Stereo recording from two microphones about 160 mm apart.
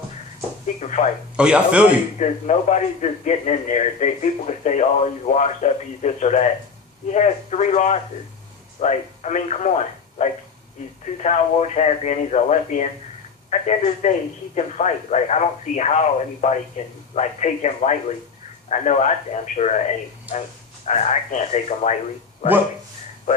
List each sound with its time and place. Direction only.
0.8 s a man's voice: 45° left (ahead or behind)
1.4 s speech: 5° right (ahead or behind)
2.1 s a man's voice: 45° left (ahead or behind)
20.8 s a man's voice: 45° left (ahead or behind)